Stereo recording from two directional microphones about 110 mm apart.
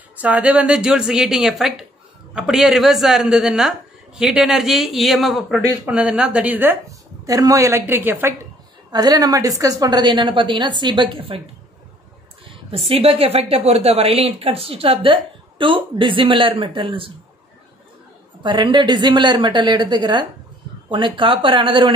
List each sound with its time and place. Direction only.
0.2 s speech: 10° right (ahead or behind)
7.2 s a woman's voice: 35° right (ahead or behind)
8.9 s a woman's voice: 35° right (ahead or behind); by 11.4 s 55° right (ahead or behind)
12.4 s a woman's voice: 60° right (ahead or behind)
18.4 s a woman's voice: 45° right (ahead or behind)